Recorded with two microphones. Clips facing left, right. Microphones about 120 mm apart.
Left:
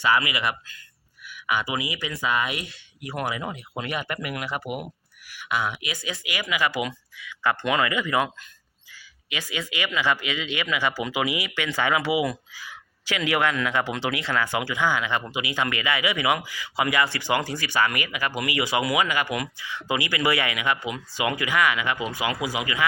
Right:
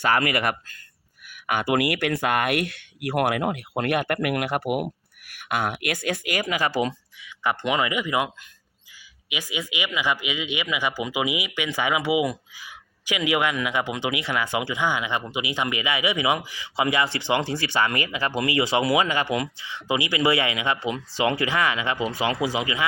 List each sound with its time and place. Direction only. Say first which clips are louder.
0.0 s speech: right 1 dB; 50° right (ahead or behind); by 22.9 s 25° right (ahead or behind)